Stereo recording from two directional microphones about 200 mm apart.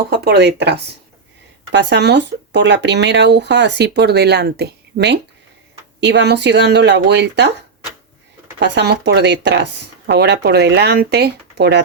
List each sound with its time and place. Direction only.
0.1 s speech: 55° right (ahead or behind)
8.5 s speech: 60° right (ahead or behind)